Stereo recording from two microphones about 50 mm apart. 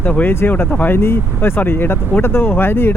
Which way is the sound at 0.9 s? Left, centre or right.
Left.